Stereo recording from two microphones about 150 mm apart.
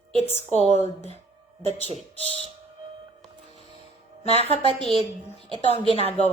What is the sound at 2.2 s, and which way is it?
Speech, 40° right (ahead or behind).